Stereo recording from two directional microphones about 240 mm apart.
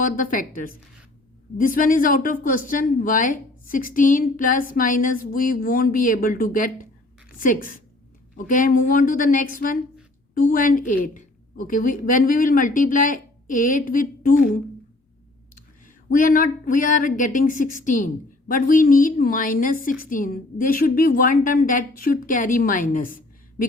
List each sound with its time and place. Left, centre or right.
0.0 s speech: left
16.0 s speech: left